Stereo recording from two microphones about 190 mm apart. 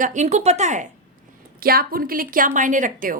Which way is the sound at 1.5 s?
50° right (ahead or behind).